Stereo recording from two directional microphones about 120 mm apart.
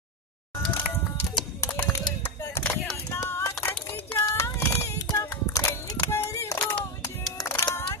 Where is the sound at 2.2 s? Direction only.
20° left (ahead or behind).